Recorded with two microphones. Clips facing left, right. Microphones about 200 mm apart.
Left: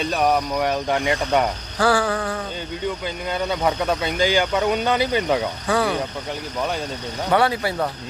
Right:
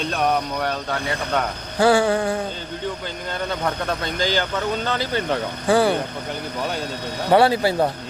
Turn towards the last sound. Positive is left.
turn(degrees=-30)  # may be behind; listen again after turning